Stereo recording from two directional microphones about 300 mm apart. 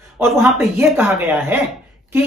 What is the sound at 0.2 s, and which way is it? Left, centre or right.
Speech, centre.